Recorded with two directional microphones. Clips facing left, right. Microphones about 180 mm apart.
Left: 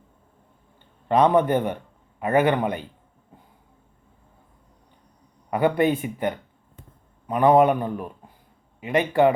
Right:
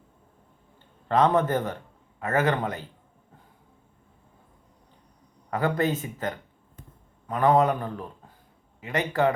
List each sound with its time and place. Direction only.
1.0 s a man's voice: 15° left (ahead or behind)
5.5 s speech: 15° left (ahead or behind)